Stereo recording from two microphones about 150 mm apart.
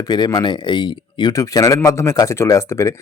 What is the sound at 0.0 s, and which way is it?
Speech, 25° left (ahead or behind).